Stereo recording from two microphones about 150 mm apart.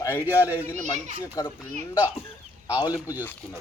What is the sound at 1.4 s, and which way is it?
Speech, 20° left (ahead or behind).